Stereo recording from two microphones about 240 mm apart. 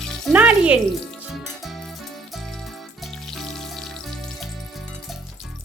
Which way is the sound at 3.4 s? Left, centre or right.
Centre.